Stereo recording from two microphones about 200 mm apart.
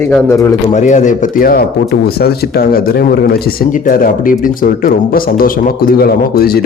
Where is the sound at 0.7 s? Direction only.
35° left (ahead or behind).